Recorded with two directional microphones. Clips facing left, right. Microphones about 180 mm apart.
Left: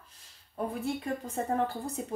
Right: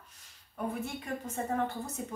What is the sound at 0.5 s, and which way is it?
Speech, 35° left (ahead or behind).